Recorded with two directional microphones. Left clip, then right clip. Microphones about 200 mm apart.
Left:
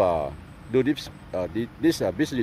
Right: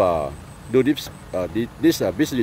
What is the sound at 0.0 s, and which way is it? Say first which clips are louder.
Speech: right 3 dB; centre (ahead or behind).